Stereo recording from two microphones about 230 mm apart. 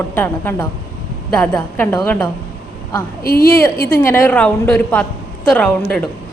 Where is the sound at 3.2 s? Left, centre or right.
Left.